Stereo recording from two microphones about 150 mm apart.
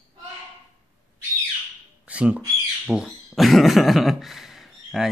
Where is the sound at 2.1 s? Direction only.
10° right (ahead or behind).